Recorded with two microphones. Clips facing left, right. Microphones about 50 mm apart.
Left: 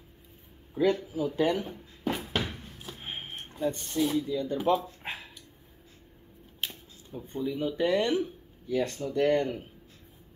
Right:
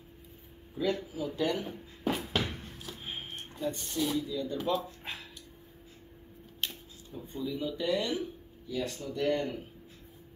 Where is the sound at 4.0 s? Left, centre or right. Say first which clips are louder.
Left 4 dB; centre.